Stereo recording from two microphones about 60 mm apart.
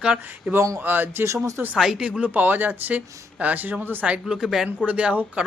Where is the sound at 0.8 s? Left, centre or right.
Right.